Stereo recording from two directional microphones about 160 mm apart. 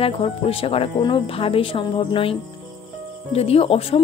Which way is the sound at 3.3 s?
40° left (ahead or behind).